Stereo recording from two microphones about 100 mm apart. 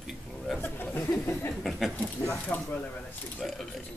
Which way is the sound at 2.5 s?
15° left (ahead or behind).